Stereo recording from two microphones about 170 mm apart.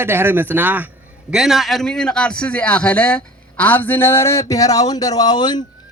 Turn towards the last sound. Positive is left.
turn(degrees=25)  # may be behind; listen again after turning